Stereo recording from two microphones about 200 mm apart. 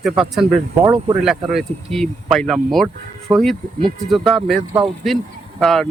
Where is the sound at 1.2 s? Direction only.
Centre (ahead or behind).